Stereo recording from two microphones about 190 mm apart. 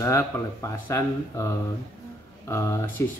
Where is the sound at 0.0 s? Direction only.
15° left (ahead or behind).